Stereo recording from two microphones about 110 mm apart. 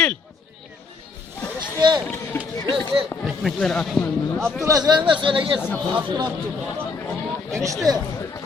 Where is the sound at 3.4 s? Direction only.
5° left (ahead or behind).